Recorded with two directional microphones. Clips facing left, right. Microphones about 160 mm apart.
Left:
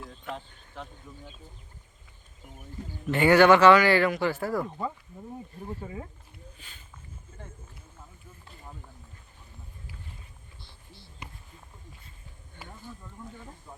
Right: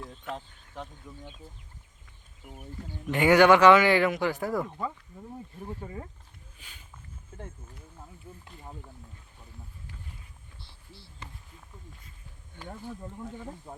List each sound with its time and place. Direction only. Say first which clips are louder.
0.0 s a sound: even; centre (ahead or behind)
1.1 s speech: right 1 dB; 5° left (ahead or behind)
3.1 s a man's voice: left 1 dB; 10° right (ahead or behind)
5.6 s speech: left 1 dB; 10° left (ahead or behind)
6.6 s speech: left 1 dB; 10° right (ahead or behind)
11.2 s a sound: left 1 dB; 15° left (ahead or behind)
13.7 s speech: right 4 dB; 35° right (ahead or behind)